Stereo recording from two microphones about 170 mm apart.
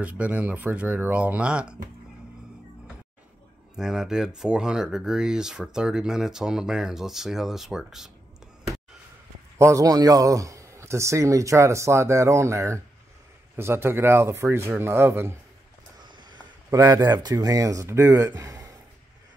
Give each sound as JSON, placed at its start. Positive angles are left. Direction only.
{"t": 0.0, "sound": "a man's voice", "side_deg": -10}
{"t": 3.7, "sound": "speech", "side_deg": -5}
{"t": 9.6, "sound": "a man's voice", "side_deg": -20}
{"t": 16.0, "sound": "speech", "side_deg": -25}